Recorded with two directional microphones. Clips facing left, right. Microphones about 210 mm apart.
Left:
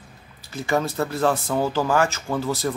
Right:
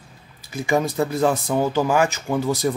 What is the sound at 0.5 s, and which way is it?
Speech, 15° right (ahead or behind).